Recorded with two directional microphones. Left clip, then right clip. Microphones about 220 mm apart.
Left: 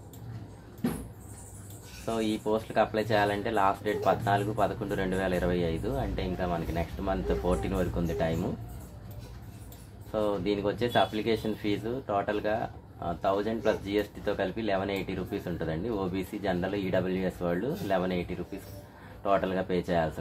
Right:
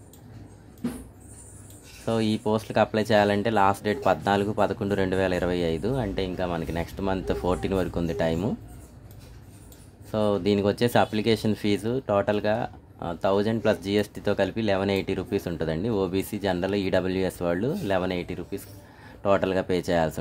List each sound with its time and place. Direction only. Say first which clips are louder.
2.0 s speech: right 4 dB; 55° right (ahead or behind)
10.1 s speech: right 5 dB; 55° right (ahead or behind)
19.2 s speech: right 4 dB; 50° right (ahead or behind)